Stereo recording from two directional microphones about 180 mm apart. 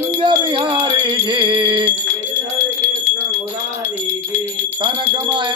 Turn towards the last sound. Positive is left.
turn(degrees=-25)  # may be behind; listen again after turning